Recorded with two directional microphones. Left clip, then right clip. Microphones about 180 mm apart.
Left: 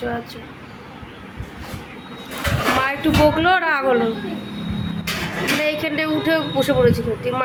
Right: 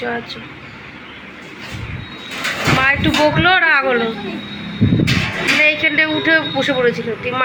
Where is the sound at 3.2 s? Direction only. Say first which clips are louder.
Right 4 dB; 10° left (ahead or behind).